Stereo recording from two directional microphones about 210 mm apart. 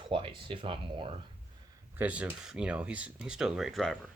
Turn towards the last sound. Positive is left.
turn(degrees=0)  # may be behind; listen again after turning